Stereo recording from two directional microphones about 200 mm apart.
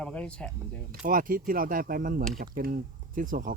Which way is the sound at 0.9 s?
45° right (ahead or behind).